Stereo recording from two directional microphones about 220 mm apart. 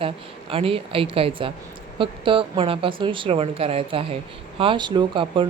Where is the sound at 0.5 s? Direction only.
25° right (ahead or behind).